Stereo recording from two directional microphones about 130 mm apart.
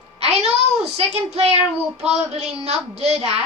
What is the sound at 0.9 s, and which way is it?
A child's voice, 55° right (ahead or behind).